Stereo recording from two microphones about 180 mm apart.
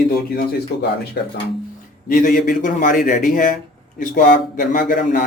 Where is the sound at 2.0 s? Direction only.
50° left (ahead or behind).